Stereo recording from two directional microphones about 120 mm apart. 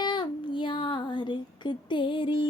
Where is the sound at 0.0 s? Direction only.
40° left (ahead or behind).